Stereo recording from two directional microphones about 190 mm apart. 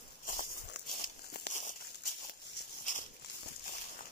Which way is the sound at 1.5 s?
40° left (ahead or behind).